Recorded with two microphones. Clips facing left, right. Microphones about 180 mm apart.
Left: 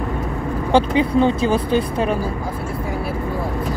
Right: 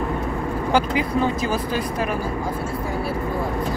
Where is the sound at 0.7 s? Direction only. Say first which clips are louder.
Left 6 dB; 30° left (ahead or behind).